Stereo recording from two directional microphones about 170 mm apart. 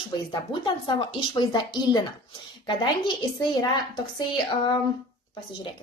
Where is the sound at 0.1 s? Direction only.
30° left (ahead or behind).